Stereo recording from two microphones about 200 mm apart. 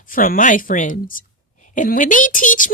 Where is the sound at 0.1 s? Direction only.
45° left (ahead or behind).